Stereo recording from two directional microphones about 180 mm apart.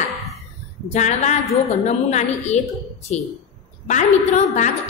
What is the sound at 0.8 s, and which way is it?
A woman's voice, 40° left (ahead or behind).